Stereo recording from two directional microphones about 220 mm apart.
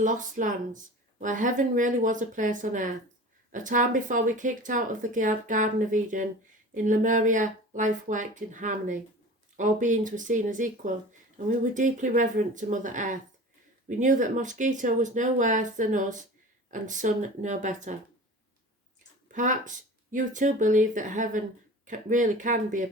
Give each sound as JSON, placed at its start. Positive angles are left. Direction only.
{"t": 0.0, "sound": "speech", "side_deg": -35}
{"t": 19.3, "sound": "speech", "side_deg": -35}